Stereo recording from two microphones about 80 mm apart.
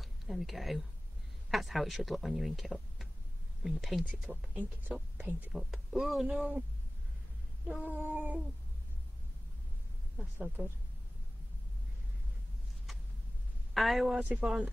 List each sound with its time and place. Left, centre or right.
0.0 s speech: centre
4.0 s speech: centre
5.5 s speech: centre
7.9 s a sound: right
13.7 s speech: centre
14.3 s speech: centre